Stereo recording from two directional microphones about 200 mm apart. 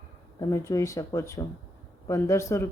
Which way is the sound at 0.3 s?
15° left (ahead or behind).